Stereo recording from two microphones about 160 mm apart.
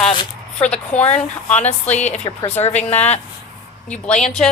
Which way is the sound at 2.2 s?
35° left (ahead or behind).